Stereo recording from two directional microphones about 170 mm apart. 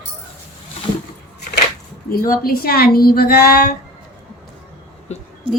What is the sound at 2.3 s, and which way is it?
Speech, 60° left (ahead or behind).